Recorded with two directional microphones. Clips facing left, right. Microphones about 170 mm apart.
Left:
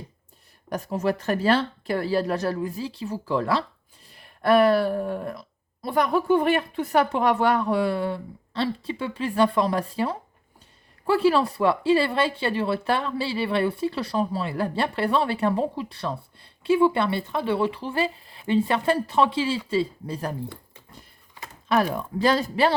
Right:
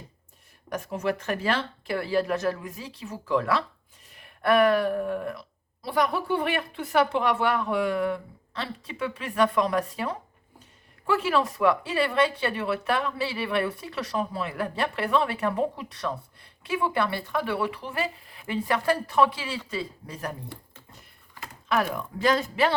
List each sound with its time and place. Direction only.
0.7 s speech: 35° left (ahead or behind)
21.7 s speech: 35° left (ahead or behind)